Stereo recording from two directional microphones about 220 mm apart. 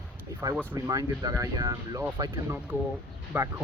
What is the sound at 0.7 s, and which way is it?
Speech, 15° right (ahead or behind).